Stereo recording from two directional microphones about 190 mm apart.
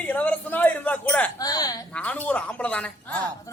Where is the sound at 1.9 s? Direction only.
5° left (ahead or behind).